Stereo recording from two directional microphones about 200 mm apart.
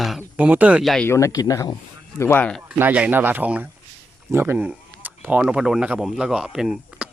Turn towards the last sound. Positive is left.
turn(degrees=0)  # may be behind; listen again after turning